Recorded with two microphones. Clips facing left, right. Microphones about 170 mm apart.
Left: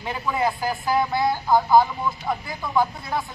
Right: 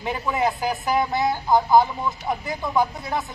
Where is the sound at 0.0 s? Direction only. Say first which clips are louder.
Right 1 dB; 20° right (ahead or behind).